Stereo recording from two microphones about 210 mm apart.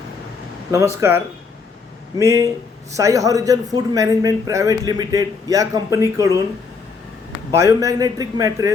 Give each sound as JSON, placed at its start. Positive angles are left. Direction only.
{"t": 0.7, "sound": "a man's voice", "side_deg": -15}
{"t": 7.5, "sound": "a man's voice", "side_deg": -15}